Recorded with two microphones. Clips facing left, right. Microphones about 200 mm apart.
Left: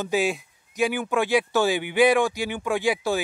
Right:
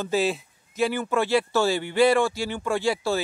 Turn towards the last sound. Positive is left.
turn(degrees=15)  # may be behind; listen again after turning